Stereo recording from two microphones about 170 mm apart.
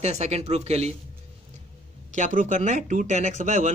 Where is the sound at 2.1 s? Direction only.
50° right (ahead or behind).